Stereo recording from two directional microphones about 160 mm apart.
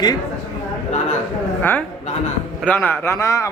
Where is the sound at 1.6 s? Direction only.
10° left (ahead or behind).